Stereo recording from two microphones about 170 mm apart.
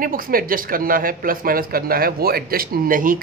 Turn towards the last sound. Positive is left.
turn(degrees=-55)  # may be behind; listen again after turning